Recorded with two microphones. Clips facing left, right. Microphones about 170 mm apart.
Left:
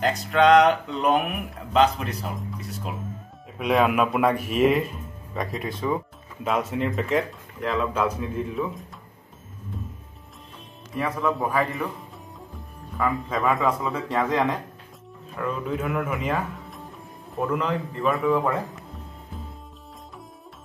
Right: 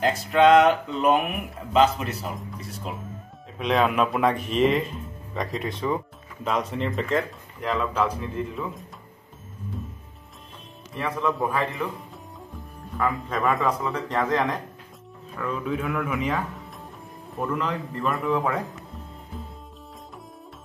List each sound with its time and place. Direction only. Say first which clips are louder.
0.0 s speech: right 1 dB; centre (ahead or behind)
11.0 s speech: left 1 dB; centre (ahead or behind)
12.9 s speech: left 1 dB; centre (ahead or behind)
15.8 s a man's voice: left 1 dB; 20° left (ahead or behind)
16.2 s music: even; centre (ahead or behind)
17.4 s speech: left 2 dB; centre (ahead or behind)